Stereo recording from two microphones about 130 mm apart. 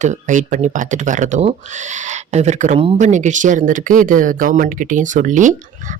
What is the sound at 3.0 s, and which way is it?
Speech, 70° right (ahead or behind).